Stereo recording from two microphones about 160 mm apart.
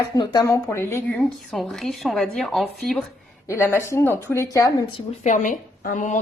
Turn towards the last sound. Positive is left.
turn(degrees=55)  # may be behind; listen again after turning